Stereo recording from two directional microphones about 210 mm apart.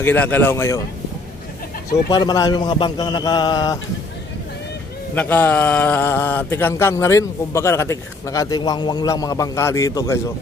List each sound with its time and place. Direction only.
0.0 s speech: 10° left (ahead or behind)
2.0 s a man's voice: 20° left (ahead or behind)
5.1 s speech: 10° left (ahead or behind)